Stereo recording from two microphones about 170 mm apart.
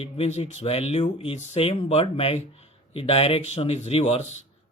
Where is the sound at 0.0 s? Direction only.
40° left (ahead or behind).